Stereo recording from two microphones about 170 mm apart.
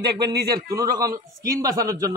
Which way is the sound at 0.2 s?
25° right (ahead or behind).